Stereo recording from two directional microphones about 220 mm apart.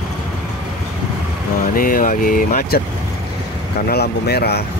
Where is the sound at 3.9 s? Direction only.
45° left (ahead or behind).